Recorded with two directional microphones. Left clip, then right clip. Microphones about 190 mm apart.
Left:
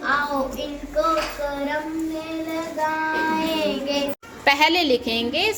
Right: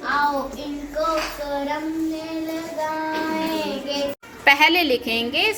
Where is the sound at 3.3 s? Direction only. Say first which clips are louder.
Left 2 dB; 20° left (ahead or behind).